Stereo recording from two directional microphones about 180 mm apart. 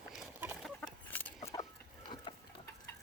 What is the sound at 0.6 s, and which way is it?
Chicken, 5° left (ahead or behind).